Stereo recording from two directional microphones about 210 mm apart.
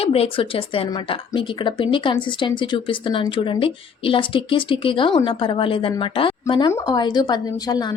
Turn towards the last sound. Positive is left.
turn(degrees=20)  # may be behind; listen again after turning